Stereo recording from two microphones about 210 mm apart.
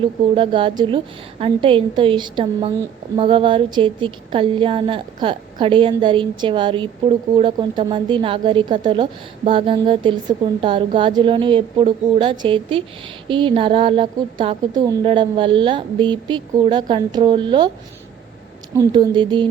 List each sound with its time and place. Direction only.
0.0 s a woman's voice: 25° right (ahead or behind)
18.8 s a woman's voice: 20° right (ahead or behind)